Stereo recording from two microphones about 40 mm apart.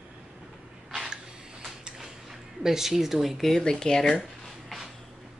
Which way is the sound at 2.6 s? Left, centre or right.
Centre.